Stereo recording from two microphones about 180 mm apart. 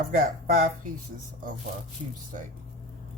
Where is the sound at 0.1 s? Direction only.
50° right (ahead or behind).